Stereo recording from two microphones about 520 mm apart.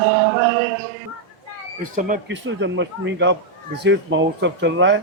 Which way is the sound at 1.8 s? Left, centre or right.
Centre.